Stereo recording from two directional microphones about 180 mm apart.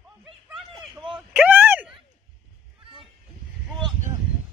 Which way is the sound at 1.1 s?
5° right (ahead or behind).